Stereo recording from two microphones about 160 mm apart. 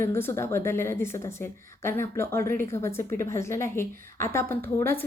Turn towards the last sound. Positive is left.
turn(degrees=15)  # may be behind; listen again after turning